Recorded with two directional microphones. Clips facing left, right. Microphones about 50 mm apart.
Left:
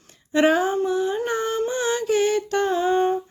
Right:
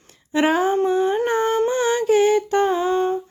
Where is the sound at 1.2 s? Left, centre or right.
Right.